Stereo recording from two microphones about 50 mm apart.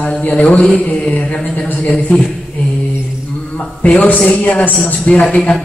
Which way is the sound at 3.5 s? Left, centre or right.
Left.